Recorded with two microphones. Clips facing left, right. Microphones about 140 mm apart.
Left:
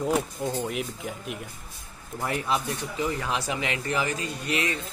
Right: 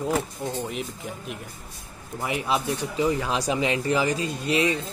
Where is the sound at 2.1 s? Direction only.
10° right (ahead or behind).